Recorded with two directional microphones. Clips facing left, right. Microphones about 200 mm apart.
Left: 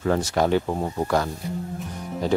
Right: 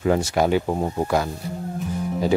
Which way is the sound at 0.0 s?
10° right (ahead or behind).